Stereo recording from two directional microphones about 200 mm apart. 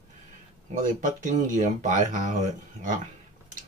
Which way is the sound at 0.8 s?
40° right (ahead or behind).